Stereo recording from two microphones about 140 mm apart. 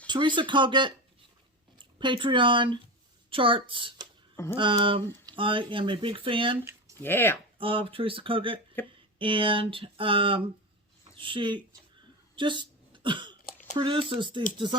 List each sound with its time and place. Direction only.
0.1 s speech: 35° right (ahead or behind)
7.0 s speech: 15° left (ahead or behind)
7.6 s speech: 40° right (ahead or behind)
8.8 s speech: 15° left (ahead or behind)
9.1 s speech: 35° right (ahead or behind)
12.4 s a sound: 35° right (ahead or behind)
13.7 s speech: 40° right (ahead or behind)